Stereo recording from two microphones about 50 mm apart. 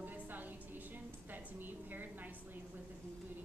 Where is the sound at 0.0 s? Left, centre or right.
Right.